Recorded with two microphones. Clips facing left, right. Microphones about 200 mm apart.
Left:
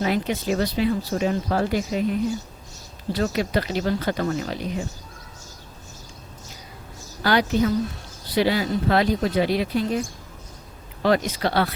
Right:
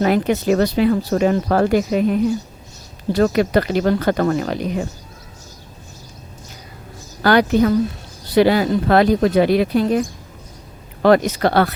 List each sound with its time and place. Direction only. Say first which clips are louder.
0.0 s speech: right 7 dB; 55° right (ahead or behind)
7.2 s speech: right 6 dB; 55° right (ahead or behind)
11.0 s speech: right 7 dB; 55° right (ahead or behind)